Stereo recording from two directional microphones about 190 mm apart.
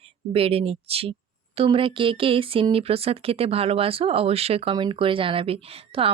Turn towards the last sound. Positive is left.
turn(degrees=-30)  # may be behind; listen again after turning